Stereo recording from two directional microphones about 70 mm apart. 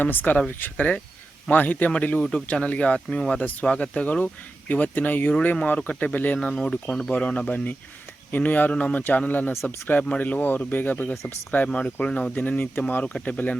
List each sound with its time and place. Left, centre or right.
0.0 s a man's voice: left
3.4 s a man's voice: left
6.4 s speech: centre
7.1 s a man's voice: centre
11.1 s speech: left
11.5 s a man's voice: centre